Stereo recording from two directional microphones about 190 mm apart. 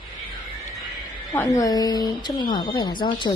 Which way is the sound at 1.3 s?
20° left (ahead or behind).